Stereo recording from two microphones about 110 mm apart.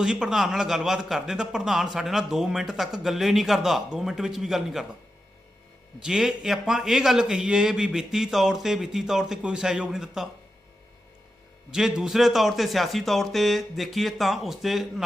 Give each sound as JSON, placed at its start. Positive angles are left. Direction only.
{"t": 0.0, "sound": "a man's voice", "side_deg": -5}
{"t": 6.0, "sound": "a man's voice", "side_deg": -5}
{"t": 11.7, "sound": "a man's voice", "side_deg": -5}